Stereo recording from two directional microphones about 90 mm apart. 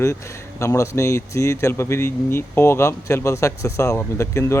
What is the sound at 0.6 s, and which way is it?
Speech, 35° left (ahead or behind).